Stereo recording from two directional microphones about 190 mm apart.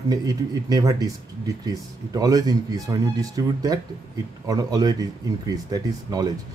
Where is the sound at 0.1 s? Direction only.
20° right (ahead or behind).